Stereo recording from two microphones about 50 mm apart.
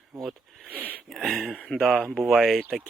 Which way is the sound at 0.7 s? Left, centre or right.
Right.